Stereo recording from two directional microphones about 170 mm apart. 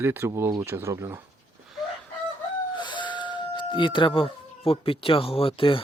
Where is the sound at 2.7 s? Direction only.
25° left (ahead or behind).